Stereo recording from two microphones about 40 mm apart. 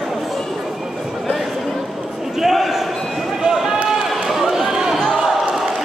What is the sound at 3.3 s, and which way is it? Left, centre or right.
Run, centre.